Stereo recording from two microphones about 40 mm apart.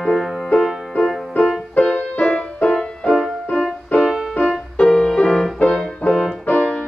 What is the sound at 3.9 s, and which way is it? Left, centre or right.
Music, left.